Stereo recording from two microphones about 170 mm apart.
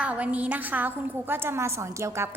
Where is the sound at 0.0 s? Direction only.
10° right (ahead or behind).